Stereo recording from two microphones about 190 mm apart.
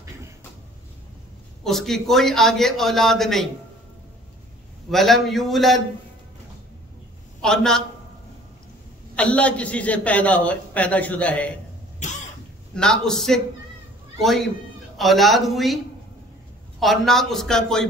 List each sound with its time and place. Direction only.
1.6 s a man's voice: centre (ahead or behind)
4.9 s a man's voice: centre (ahead or behind)
7.4 s a man's voice: 5° left (ahead or behind)
9.1 s a man's voice: 5° left (ahead or behind)
12.0 s cough: 40° left (ahead or behind)
12.7 s a man's voice: 5° left (ahead or behind)
16.8 s a man's voice: centre (ahead or behind)